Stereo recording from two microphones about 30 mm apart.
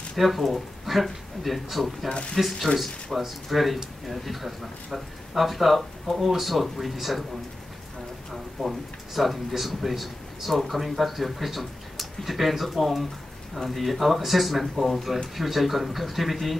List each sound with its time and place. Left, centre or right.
0.1 s speech: centre
2.0 s speech: left
2.3 s speech: centre
8.6 s speech: centre